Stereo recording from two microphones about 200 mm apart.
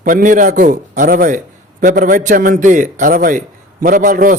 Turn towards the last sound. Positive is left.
turn(degrees=-40)  # may be behind; listen again after turning